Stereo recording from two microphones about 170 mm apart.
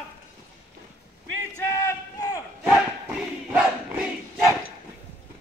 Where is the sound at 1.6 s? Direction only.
15° left (ahead or behind).